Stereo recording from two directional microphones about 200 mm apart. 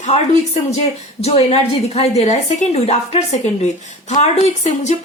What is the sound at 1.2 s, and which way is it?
A woman's voice, 30° left (ahead or behind).